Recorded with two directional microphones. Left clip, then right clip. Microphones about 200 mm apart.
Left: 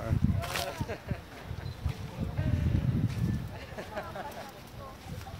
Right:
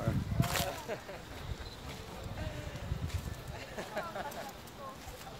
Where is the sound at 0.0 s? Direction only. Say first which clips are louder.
Left 2 dB; 5° right (ahead or behind).